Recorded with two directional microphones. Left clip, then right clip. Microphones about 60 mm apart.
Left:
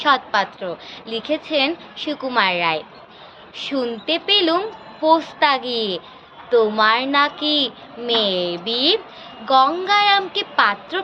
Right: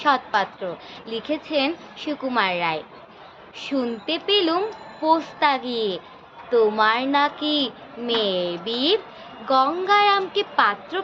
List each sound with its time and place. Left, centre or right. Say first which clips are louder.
0.0 s a woman's voice: left 3 dB; right